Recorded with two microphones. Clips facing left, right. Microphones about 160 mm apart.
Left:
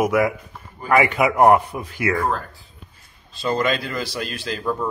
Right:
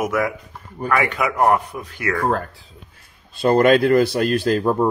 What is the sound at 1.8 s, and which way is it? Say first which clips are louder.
Speech: left 2 dB; 5° left (ahead or behind).